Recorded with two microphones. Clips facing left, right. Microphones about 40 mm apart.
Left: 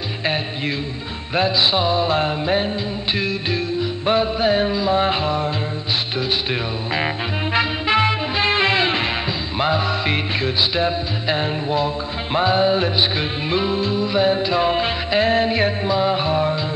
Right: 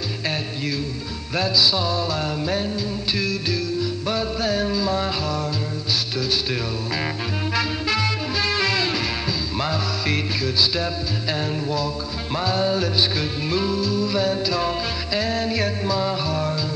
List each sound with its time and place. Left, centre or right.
1.3 s music: left
4.0 s music: left
7.5 s music: left